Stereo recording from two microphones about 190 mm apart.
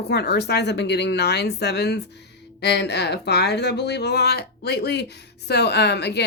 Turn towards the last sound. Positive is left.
turn(degrees=60)  # may be behind; listen again after turning